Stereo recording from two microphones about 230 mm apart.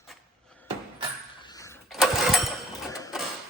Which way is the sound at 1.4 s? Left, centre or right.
Centre.